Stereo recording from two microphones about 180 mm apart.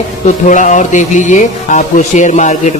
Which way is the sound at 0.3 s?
45° left (ahead or behind).